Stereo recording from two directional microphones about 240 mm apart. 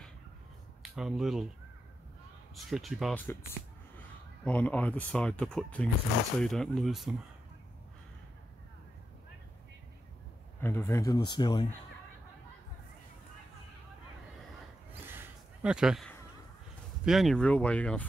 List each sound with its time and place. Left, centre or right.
0.9 s speech: centre
2.5 s speech: centre
4.5 s speech: centre
10.6 s speech: centre
15.0 s a sound: centre
17.0 s speech: centre